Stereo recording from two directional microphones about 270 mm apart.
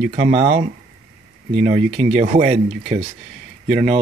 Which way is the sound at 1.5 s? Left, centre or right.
Right.